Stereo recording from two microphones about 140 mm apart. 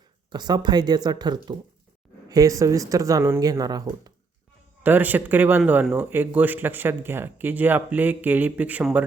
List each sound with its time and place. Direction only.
0.3 s speech: 30° right (ahead or behind)
4.8 s speech: 15° right (ahead or behind)